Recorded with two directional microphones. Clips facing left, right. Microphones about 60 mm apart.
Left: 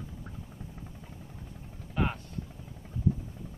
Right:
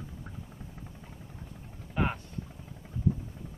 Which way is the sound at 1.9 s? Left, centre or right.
Centre.